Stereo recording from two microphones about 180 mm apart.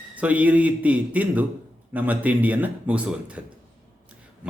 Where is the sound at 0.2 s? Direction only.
10° right (ahead or behind).